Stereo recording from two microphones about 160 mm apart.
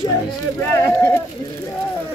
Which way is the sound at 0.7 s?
15° left (ahead or behind).